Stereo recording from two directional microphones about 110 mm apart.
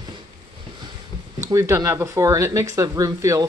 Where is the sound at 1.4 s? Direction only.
30° right (ahead or behind).